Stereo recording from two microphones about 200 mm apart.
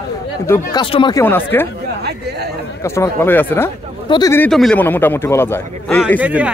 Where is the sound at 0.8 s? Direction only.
25° left (ahead or behind).